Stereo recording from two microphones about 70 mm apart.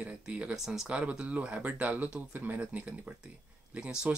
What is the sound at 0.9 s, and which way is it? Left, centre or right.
Speech, centre.